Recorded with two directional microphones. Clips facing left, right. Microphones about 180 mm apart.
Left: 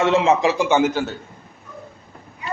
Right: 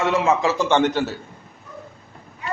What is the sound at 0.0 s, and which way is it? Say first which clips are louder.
A man's voice: left 3 dB; 25° left (ahead or behind).